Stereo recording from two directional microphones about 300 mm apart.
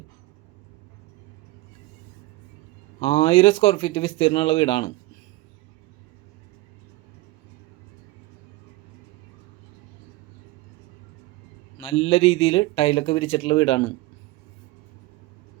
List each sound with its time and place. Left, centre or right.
3.0 s speech: centre
11.8 s speech: centre